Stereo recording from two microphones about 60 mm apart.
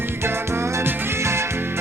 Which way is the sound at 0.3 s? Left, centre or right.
Right.